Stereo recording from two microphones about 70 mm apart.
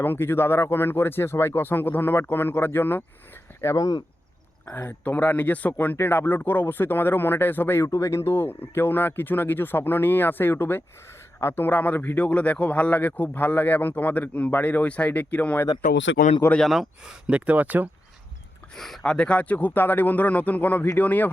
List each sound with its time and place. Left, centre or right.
0.0 s speech: left
3.6 s speech: left
4.6 s speech: left
5.1 s speech: left
7.9 s speech: left
16.6 s speech: centre
17.2 s speech: centre
18.8 s speech: centre